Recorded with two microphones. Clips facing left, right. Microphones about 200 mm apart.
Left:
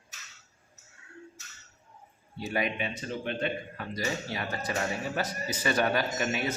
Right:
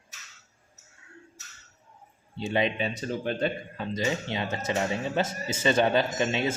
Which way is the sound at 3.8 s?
20° right (ahead or behind).